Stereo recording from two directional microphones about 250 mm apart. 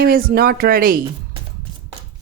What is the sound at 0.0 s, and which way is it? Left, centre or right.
Speech, right.